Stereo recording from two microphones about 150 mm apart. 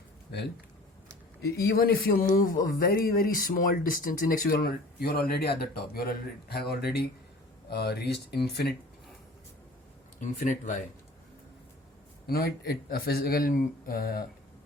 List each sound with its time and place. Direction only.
1.4 s speech: 90° left
2.3 s speech: 70° left (ahead or behind); by 8.7 s 90° left
10.2 s speech: 55° left (ahead or behind)
12.3 s speech: 90° left